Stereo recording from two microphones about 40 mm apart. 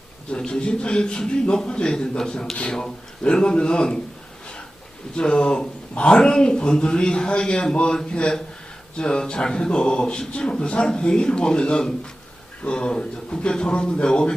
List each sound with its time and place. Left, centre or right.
0.3 s speech: left
5.1 s speech: left